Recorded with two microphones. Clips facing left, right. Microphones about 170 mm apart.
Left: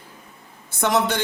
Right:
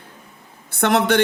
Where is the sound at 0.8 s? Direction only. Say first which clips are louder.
Right 5 dB; 65° right (ahead or behind).